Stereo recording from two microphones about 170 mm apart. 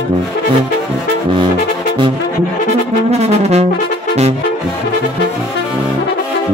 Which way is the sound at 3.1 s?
40° right (ahead or behind).